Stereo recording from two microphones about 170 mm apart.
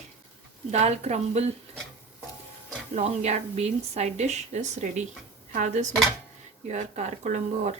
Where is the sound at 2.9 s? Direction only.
40° right (ahead or behind).